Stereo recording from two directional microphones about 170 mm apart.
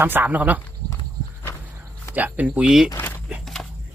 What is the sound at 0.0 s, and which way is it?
Speech, 10° right (ahead or behind).